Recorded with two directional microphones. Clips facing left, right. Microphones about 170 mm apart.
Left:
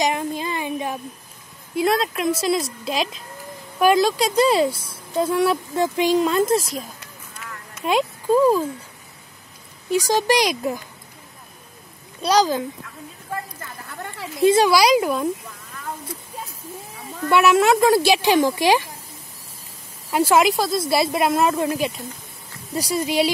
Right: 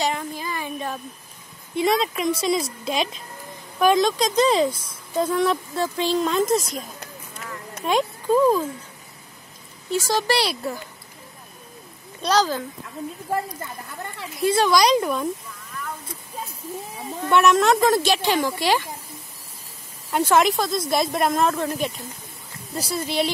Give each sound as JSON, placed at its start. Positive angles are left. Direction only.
{"t": 0.0, "sound": "a sound", "side_deg": 20}
{"t": 1.8, "sound": "a woman's voice", "side_deg": 0}
{"t": 6.2, "sound": "a woman's voice", "side_deg": 5}
{"t": 9.8, "sound": "speech", "side_deg": 15}
{"t": 12.2, "sound": "speech", "side_deg": 10}
{"t": 14.4, "sound": "speech", "side_deg": 20}
{"t": 14.7, "sound": "a woman's voice", "side_deg": 5}
{"t": 17.3, "sound": "speech", "side_deg": 5}
{"t": 20.1, "sound": "a woman's voice", "side_deg": 5}